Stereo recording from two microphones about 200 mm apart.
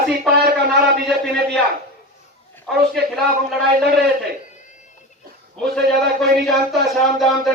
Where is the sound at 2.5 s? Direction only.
Centre (ahead or behind).